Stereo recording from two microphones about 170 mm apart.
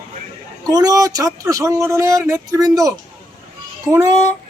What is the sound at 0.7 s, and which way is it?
Speech, 20° right (ahead or behind).